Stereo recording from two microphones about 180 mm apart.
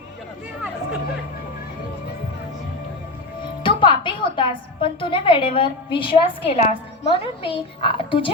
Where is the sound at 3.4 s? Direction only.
25° left (ahead or behind).